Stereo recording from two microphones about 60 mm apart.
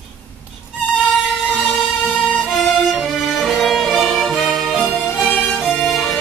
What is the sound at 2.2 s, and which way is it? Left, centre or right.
Violin, centre.